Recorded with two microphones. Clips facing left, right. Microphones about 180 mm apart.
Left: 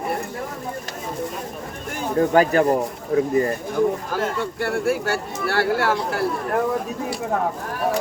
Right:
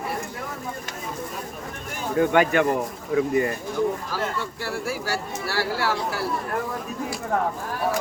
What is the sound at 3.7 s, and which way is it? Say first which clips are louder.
Speech: left 5 dB; 55° left (ahead or behind).